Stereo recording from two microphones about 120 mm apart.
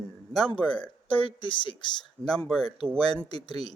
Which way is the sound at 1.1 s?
45° left (ahead or behind).